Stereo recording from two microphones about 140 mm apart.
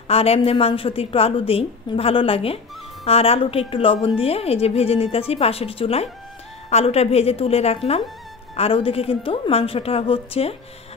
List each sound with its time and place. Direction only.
0.1 s a woman's voice: 45° left (ahead or behind)